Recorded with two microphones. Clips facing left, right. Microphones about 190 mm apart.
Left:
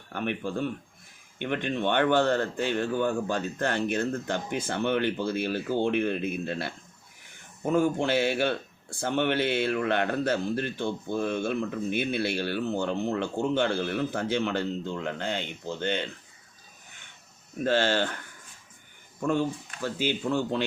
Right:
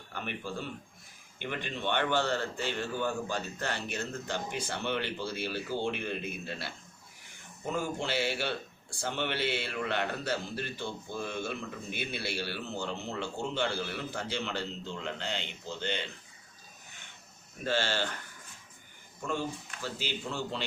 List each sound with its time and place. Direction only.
0.1 s a man's voice: 55° left (ahead or behind)
1.4 s a man's voice: 55° left (ahead or behind)
17.7 s a man's voice: 55° left (ahead or behind)
19.2 s a man's voice: 55° left (ahead or behind)